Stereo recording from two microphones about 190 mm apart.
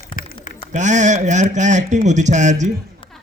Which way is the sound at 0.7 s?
40° right (ahead or behind).